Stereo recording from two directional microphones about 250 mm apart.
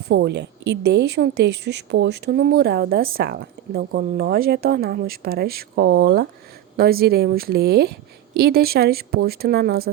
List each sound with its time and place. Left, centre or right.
0.1 s speech: right